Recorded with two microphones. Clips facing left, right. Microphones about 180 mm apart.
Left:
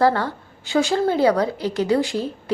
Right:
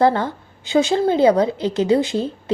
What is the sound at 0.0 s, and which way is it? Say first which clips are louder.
A woman's voice: right 2 dB; 20° right (ahead or behind).